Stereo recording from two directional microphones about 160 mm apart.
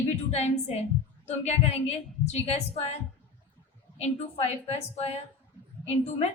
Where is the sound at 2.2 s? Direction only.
40° left (ahead or behind).